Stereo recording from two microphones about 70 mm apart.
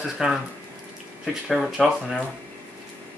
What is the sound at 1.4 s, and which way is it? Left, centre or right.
Speech, centre.